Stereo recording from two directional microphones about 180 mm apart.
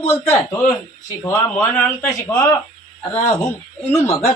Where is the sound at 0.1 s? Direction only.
15° left (ahead or behind).